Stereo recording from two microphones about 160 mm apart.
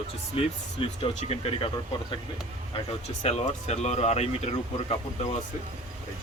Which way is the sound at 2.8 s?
40° left (ahead or behind).